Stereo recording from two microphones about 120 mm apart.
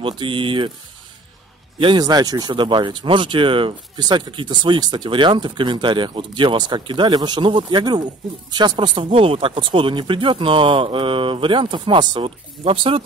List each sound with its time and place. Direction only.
0.0 s speech: 45° right (ahead or behind)
1.8 s speech: 40° right (ahead or behind)